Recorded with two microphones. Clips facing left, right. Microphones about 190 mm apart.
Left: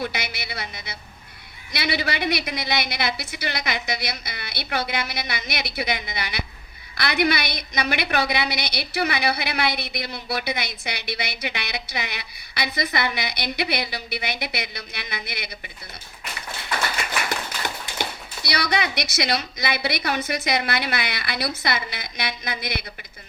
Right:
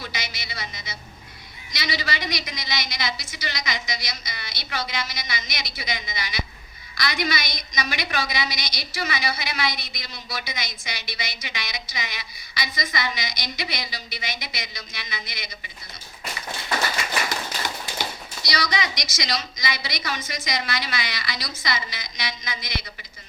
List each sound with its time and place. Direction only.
0.0 s a woman's voice: 60° left (ahead or behind)
17.0 s a sound: 60° left (ahead or behind)
18.4 s a woman's voice: 60° left (ahead or behind)